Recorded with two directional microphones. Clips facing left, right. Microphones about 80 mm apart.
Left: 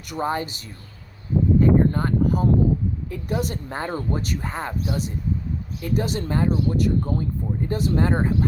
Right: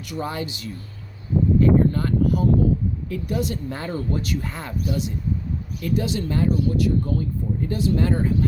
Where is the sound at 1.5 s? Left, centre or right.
Left.